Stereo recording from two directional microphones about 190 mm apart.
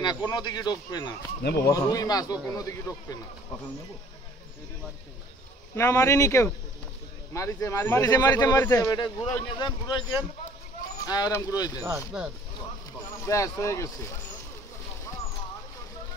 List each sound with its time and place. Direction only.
0.0 s speech: 20° left (ahead or behind)
1.4 s speech: 60° left (ahead or behind)
1.7 s speech: 20° left (ahead or behind)
5.8 s speech: 15° left (ahead or behind)
11.1 s speech: 20° left (ahead or behind)
12.1 s speech: 5° right (ahead or behind)
13.3 s speech: 15° left (ahead or behind)